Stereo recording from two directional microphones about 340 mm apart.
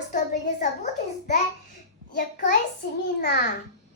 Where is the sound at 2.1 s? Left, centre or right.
Left.